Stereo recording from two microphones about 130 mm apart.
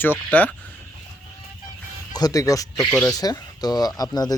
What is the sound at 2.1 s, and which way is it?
Speech, 30° left (ahead or behind).